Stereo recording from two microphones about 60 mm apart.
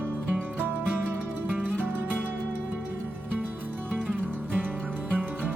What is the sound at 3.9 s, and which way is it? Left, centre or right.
Music, centre.